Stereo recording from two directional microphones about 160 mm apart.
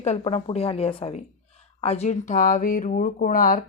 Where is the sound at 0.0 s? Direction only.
40° left (ahead or behind).